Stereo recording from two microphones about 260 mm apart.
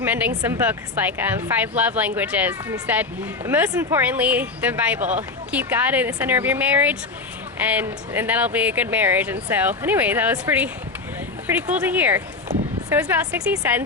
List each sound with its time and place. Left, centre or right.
0.0 s a sound: centre
0.4 s speech: centre
4.9 s speech: right
5.5 s speech: centre
11.7 s speech: centre